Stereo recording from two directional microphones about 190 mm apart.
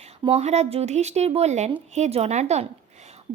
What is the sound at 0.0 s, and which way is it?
A woman's voice, 35° right (ahead or behind).